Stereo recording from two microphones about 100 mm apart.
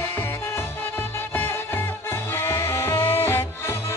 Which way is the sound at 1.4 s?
20° left (ahead or behind).